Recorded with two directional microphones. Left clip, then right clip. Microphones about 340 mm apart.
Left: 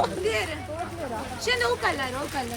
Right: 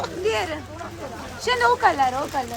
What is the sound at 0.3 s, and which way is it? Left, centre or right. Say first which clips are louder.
Speech: right 3 dB; right.